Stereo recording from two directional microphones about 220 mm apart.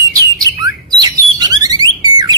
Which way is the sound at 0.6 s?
15° right (ahead or behind).